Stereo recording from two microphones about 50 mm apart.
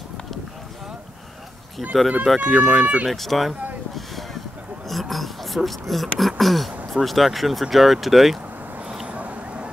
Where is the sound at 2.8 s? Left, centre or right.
Right.